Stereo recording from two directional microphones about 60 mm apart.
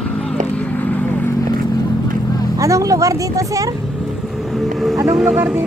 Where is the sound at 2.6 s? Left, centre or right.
Right.